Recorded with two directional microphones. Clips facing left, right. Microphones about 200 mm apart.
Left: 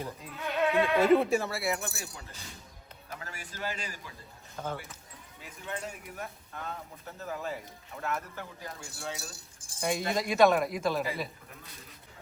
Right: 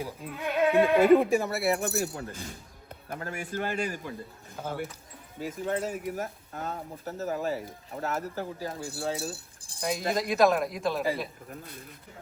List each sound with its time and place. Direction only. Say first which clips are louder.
0.3 s speech: right 4 dB; 15° right (ahead or behind)
1.9 s a man's voice: right 13 dB; 50° right (ahead or behind)
4.5 s speech: right 1 dB; 10° right (ahead or behind)
5.4 s speech: right 9 dB; 45° right (ahead or behind)
9.8 s speech: right 1 dB; centre (ahead or behind)